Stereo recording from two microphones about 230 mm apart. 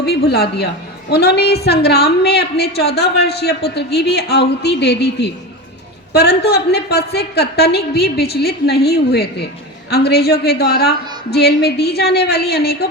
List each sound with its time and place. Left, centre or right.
0.0 s a woman's voice: left